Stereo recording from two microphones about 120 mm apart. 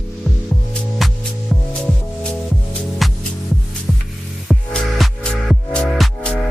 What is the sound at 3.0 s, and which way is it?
Music, centre (ahead or behind).